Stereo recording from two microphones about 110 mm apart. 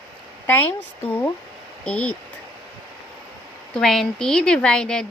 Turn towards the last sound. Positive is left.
turn(degrees=5)  # may be behind; listen again after turning